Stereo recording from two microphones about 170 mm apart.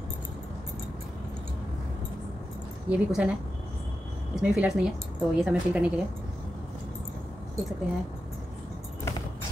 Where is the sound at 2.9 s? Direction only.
5° right (ahead or behind).